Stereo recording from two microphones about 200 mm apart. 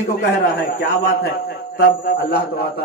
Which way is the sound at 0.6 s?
55° left (ahead or behind).